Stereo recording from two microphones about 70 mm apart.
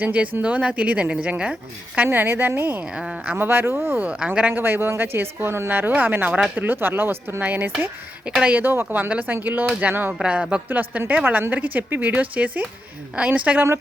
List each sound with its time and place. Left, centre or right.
0.0 s speech: centre
2.0 s a woman's voice: right
2.8 s speech: centre
3.3 s a woman's voice: right
4.0 s speech: centre
10.7 s speech: right